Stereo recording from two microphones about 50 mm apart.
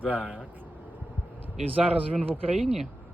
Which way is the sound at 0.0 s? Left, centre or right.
Right.